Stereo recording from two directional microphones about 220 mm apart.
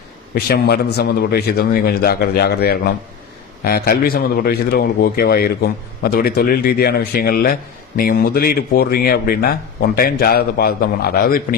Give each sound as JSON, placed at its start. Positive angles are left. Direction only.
{"t": 0.3, "sound": "a man's voice", "side_deg": 45}